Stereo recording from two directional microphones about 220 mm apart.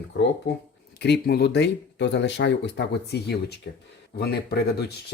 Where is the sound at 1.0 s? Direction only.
45° left (ahead or behind).